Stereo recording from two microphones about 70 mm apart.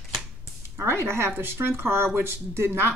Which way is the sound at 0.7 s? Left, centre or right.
Right.